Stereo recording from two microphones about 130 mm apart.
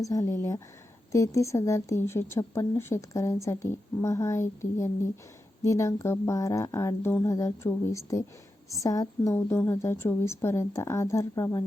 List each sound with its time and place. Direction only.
0.1 s a woman's voice: 25° left (ahead or behind)